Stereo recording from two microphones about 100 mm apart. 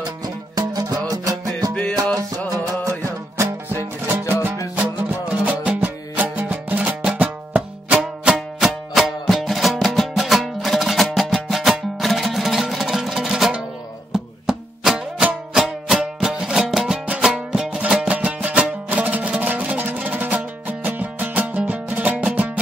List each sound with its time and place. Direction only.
0.6 s music: 40° right (ahead or behind)
5.3 s music: 15° right (ahead or behind)